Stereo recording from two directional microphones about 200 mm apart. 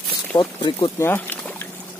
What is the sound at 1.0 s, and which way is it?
Rowboat, 10° left (ahead or behind).